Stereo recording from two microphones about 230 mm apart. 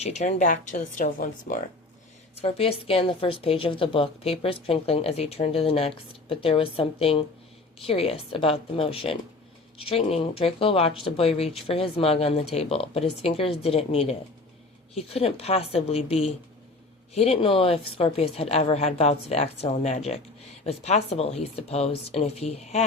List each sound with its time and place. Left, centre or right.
0.0 s a woman's voice: left